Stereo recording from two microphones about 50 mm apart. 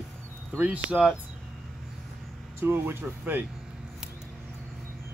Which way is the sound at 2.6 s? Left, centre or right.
Right.